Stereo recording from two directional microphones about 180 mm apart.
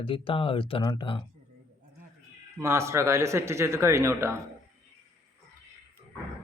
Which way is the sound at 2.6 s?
15° right (ahead or behind).